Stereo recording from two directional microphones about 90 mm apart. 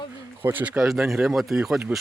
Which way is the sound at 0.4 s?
20° right (ahead or behind).